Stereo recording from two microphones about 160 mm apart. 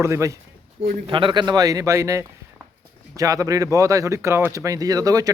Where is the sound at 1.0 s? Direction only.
30° right (ahead or behind).